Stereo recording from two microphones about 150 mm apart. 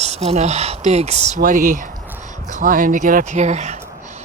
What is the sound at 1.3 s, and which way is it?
Speech, 60° right (ahead or behind).